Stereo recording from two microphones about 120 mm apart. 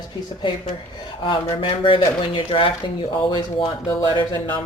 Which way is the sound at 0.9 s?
45° left (ahead or behind).